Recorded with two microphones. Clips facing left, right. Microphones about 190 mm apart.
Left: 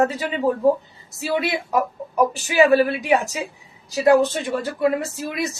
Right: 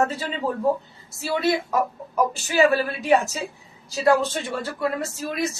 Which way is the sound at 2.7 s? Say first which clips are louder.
Left 3 dB; 15° left (ahead or behind).